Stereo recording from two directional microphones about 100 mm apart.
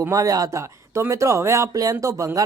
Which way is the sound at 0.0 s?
35° right (ahead or behind).